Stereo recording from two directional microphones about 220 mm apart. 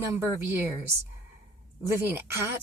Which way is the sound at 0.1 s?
10° right (ahead or behind).